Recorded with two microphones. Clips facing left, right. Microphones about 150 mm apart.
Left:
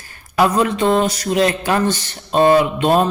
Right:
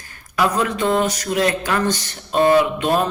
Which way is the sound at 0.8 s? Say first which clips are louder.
Left 3 dB; 20° left (ahead or behind).